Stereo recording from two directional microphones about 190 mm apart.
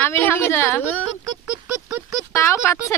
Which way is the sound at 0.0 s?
10° left (ahead or behind).